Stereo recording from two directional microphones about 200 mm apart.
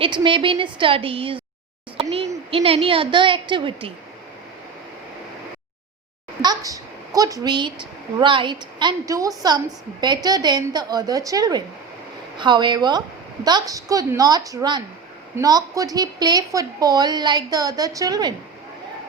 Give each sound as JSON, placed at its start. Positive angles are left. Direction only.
{"t": 0.0, "sound": "a woman's voice", "side_deg": -25}
{"t": 6.4, "sound": "a woman's voice", "side_deg": -20}